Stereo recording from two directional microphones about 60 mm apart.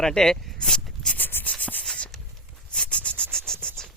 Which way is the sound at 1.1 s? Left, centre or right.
Left.